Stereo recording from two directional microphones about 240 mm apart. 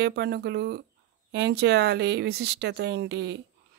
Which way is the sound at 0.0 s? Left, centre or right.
Right.